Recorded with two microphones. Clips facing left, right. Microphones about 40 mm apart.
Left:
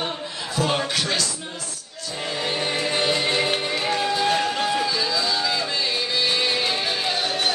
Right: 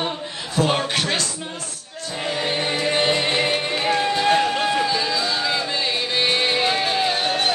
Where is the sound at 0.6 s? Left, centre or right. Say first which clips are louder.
Right 4 dB; right.